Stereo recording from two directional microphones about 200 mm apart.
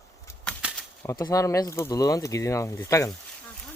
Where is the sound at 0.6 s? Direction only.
5° right (ahead or behind).